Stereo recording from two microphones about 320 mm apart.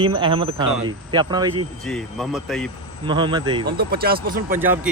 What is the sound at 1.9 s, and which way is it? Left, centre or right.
Speech, centre.